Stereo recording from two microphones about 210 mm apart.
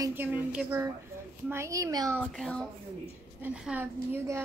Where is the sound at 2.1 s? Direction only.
Centre (ahead or behind).